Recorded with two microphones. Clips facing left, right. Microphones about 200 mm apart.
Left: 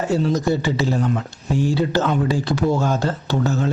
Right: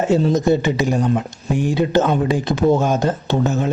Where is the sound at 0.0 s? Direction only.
20° right (ahead or behind).